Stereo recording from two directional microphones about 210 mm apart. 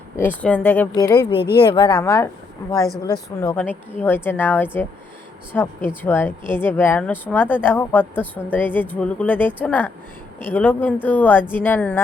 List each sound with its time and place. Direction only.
0.2 s speech: 10° left (ahead or behind)